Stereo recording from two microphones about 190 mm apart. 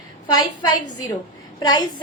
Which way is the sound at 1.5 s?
20° left (ahead or behind).